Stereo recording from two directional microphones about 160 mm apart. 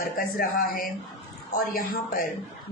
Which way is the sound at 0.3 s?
65° left (ahead or behind).